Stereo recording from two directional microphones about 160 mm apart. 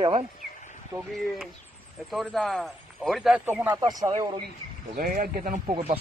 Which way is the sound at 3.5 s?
10° right (ahead or behind).